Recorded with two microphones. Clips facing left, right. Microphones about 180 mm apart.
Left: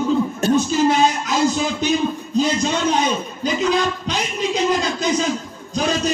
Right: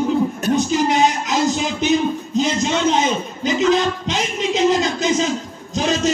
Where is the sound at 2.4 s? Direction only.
20° right (ahead or behind).